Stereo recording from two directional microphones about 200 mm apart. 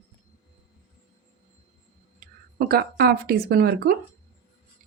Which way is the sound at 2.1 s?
50° right (ahead or behind).